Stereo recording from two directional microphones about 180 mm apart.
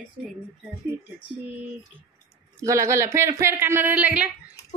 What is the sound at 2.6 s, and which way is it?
Speech, 15° right (ahead or behind).